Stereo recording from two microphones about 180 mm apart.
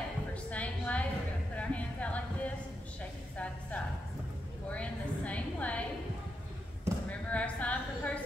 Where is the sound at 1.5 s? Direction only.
5° left (ahead or behind).